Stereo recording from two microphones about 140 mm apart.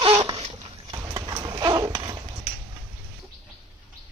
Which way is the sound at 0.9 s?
30° right (ahead or behind).